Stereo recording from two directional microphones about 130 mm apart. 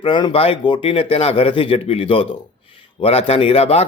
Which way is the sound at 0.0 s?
35° left (ahead or behind).